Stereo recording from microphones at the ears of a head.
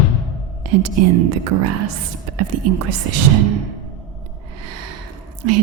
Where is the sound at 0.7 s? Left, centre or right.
Right.